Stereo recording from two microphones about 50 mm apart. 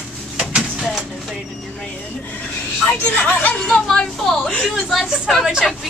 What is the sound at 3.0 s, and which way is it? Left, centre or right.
Speech, left.